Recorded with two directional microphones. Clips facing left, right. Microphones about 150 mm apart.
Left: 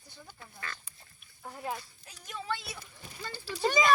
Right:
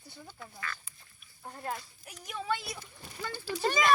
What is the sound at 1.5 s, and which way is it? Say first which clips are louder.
Speech: left 1 dB; 5° left (ahead or behind).